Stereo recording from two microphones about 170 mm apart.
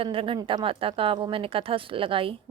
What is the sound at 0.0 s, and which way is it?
Speech, 30° right (ahead or behind).